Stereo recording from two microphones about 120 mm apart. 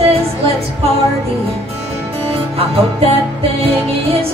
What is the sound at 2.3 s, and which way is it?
Music, 55° right (ahead or behind).